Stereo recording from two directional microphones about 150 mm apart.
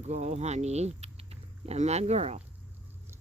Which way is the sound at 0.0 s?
50° right (ahead or behind).